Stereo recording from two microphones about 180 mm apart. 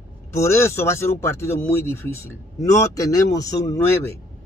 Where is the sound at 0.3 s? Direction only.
15° left (ahead or behind).